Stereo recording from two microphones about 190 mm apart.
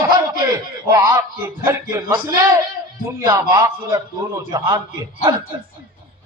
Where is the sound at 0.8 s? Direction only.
15° right (ahead or behind).